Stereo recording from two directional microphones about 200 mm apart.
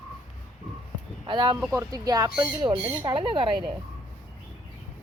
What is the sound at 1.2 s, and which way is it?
Speech, 25° right (ahead or behind).